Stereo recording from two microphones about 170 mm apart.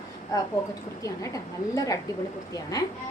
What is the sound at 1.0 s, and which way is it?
Speech, 20° left (ahead or behind).